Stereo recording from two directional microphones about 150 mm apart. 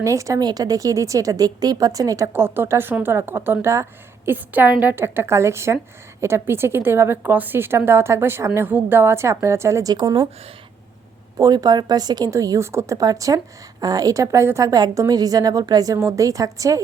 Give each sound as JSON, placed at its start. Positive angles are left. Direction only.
{"t": 0.0, "sound": "a woman's voice", "side_deg": -20}
{"t": 11.3, "sound": "a woman's voice", "side_deg": -25}